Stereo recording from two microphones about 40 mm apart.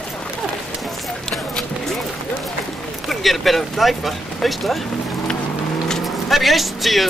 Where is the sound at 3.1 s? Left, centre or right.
Centre.